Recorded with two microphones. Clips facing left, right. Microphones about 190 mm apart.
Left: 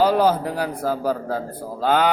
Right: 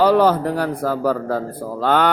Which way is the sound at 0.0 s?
65° right (ahead or behind).